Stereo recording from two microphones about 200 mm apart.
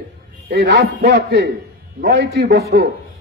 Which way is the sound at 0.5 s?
60° right (ahead or behind).